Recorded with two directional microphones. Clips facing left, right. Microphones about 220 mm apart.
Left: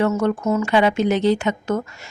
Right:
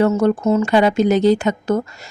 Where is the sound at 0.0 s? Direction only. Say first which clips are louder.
Right 4 dB; 35° right (ahead or behind).